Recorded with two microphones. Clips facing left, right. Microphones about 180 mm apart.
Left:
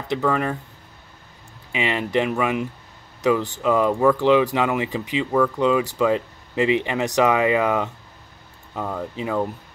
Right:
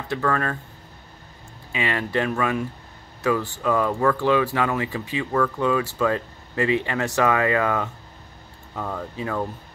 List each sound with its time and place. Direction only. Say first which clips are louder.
0.1 s speech: left 2 dB; 15° left (ahead or behind)
1.7 s speech: left 2 dB; 20° left (ahead or behind)